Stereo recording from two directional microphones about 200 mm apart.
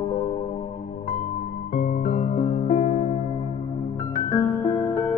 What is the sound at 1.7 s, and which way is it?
Music, 40° left (ahead or behind).